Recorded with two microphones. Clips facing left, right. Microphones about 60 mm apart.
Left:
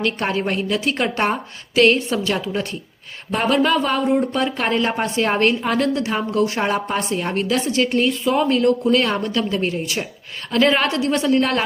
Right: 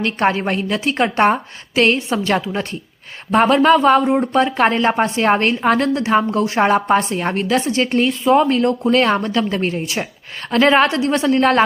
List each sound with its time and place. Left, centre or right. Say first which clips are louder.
0.0 s a woman's voice: right 4 dB; right
3.3 s speech: right 6 dB; right